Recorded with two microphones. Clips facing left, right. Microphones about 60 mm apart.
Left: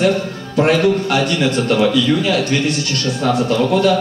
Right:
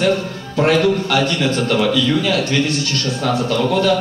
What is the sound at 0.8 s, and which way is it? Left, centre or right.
Speech, left.